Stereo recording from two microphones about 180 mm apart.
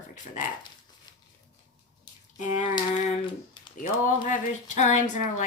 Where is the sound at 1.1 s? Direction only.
20° left (ahead or behind).